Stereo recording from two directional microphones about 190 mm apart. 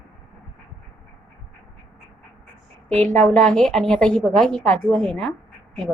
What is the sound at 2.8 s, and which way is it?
A woman's voice, 5° left (ahead or behind).